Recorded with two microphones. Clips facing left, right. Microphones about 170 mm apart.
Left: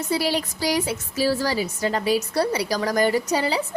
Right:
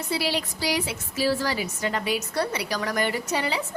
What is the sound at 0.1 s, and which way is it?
A woman's voice, 45° left (ahead or behind).